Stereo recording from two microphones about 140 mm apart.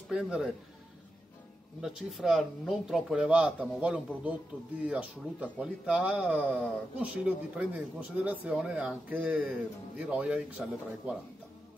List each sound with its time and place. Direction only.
0.1 s speech: 5° right (ahead or behind)
1.8 s speech: centre (ahead or behind)